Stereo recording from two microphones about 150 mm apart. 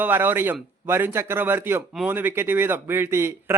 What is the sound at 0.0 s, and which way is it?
Speech, 15° right (ahead or behind).